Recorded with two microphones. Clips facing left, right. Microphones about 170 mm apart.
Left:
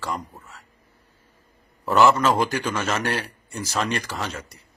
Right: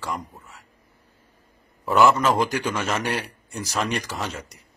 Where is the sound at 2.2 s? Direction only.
5° left (ahead or behind).